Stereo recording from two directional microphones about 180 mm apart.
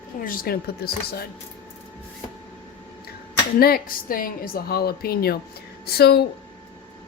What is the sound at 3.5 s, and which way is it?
A woman's voice, 60° left (ahead or behind).